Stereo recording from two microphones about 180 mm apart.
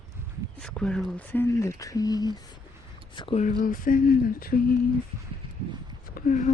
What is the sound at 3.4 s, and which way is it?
Speech, 50° left (ahead or behind).